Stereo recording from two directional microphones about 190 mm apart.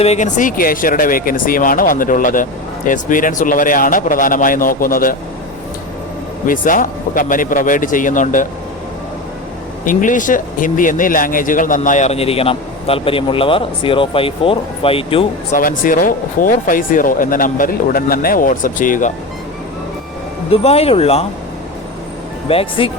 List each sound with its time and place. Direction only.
0.0 s speech: 35° left (ahead or behind)
6.4 s speech: 45° left (ahead or behind)
9.8 s speech: 45° left (ahead or behind); by 15.2 s 30° left (ahead or behind)
15.5 s speech: 45° left (ahead or behind)
20.5 s speech: 30° left (ahead or behind)
22.4 s speech: 30° left (ahead or behind)